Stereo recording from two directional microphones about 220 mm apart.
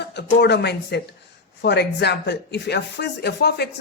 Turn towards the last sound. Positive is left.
turn(degrees=45)  # may be behind; listen again after turning